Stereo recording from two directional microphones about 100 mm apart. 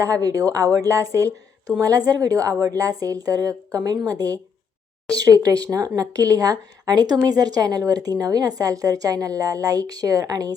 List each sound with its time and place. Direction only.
0.0 s a woman's voice: 35° right (ahead or behind)